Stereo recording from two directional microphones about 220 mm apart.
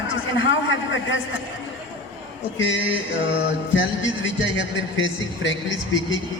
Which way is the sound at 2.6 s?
55° left (ahead or behind).